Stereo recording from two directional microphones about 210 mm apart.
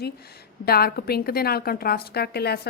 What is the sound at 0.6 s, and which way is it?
A woman's voice, 45° left (ahead or behind).